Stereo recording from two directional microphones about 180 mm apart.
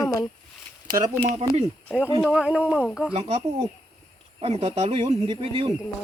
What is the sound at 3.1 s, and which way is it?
Speech, 30° right (ahead or behind).